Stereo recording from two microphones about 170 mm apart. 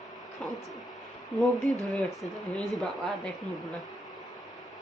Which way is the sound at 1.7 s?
5° left (ahead or behind).